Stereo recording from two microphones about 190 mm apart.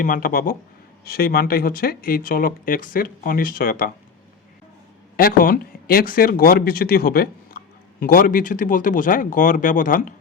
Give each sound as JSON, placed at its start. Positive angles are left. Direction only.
{"t": 0.0, "sound": "speech", "side_deg": 50}
{"t": 5.1, "sound": "speech", "side_deg": 50}